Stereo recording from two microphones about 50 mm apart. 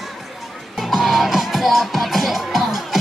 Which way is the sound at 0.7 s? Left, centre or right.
Centre.